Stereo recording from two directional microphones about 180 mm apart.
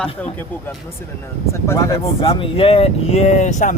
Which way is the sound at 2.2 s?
30° left (ahead or behind).